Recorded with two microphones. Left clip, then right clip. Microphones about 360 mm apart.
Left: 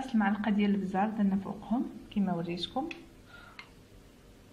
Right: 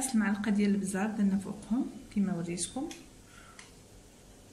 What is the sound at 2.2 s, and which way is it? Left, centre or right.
Speech, left.